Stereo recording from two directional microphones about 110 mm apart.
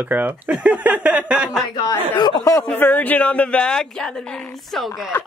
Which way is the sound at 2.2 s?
40° left (ahead or behind).